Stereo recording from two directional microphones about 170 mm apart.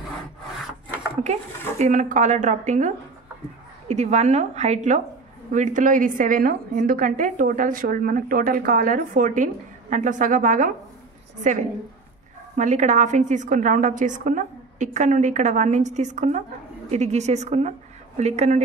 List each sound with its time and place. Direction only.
1.8 s a woman's voice: 50° right (ahead or behind)
3.9 s a woman's voice: 40° right (ahead or behind)
12.5 s a woman's voice: 45° right (ahead or behind)